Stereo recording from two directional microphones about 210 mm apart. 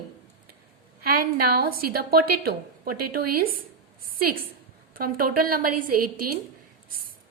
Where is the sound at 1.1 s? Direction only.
45° right (ahead or behind).